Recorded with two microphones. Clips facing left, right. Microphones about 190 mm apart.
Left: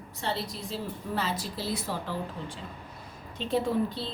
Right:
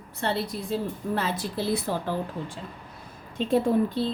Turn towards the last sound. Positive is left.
turn(degrees=-50)  # may be behind; listen again after turning